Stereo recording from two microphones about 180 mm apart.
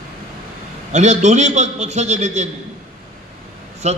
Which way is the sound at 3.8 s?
40° right (ahead or behind).